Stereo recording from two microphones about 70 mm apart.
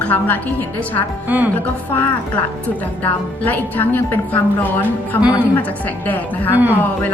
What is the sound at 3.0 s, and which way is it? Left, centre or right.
A woman's voice, left.